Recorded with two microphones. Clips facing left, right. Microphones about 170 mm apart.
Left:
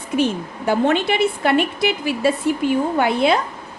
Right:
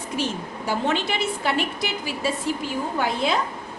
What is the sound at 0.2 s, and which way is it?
A woman's voice, 60° left (ahead or behind).